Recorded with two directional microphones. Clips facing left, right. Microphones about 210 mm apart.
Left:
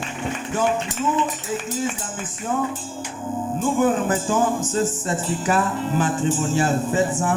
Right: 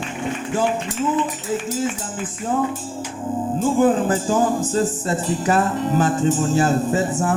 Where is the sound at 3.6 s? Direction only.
35° right (ahead or behind).